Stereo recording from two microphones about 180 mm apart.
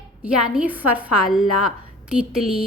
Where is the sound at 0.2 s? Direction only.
5° right (ahead or behind).